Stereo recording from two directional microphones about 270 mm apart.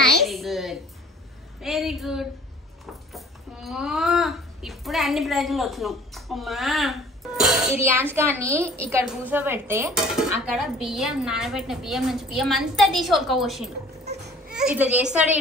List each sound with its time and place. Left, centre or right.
0.0 s a sound: centre
1.6 s dishes: centre
3.1 s a child's voice: centre
8.9 s dishes: centre